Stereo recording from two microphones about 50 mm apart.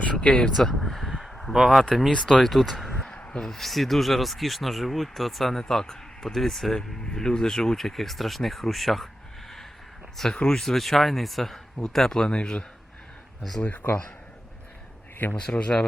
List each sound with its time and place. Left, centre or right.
0.0 s speech: left
0.5 s a sound: centre
1.8 s speech: centre
3.1 s speech: centre
10.3 s speech: left
10.6 s speech: centre; by 12.6 s left
13.8 s speech: left
15.4 s speech: left